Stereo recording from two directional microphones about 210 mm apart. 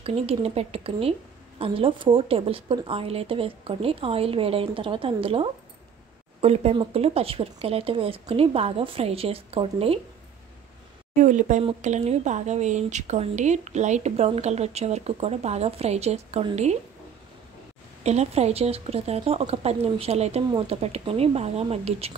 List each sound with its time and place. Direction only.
0.0 s a woman's voice: 30° right (ahead or behind)
11.1 s speech: 35° right (ahead or behind)
18.0 s a woman's voice: 30° right (ahead or behind)